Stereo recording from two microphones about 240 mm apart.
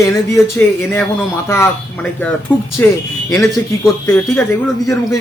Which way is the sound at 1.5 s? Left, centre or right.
Centre.